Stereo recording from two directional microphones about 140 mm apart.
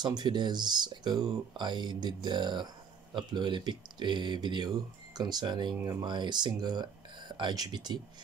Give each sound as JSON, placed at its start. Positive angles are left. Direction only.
{"t": 0.0, "sound": "speech", "side_deg": -30}